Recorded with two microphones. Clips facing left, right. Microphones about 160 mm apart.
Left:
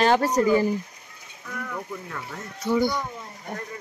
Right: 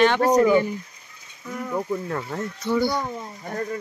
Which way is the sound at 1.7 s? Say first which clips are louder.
Right 8 dB; 45° right (ahead or behind).